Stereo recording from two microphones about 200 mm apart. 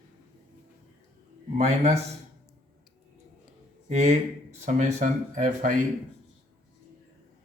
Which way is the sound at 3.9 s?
35° right (ahead or behind).